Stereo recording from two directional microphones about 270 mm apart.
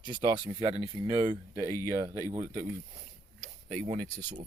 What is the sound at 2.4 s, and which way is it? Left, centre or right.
Speech, right.